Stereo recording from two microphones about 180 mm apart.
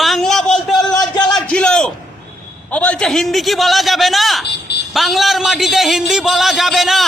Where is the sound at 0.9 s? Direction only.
20° left (ahead or behind).